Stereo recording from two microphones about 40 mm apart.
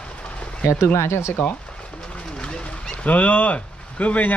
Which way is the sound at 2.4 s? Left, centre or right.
Left.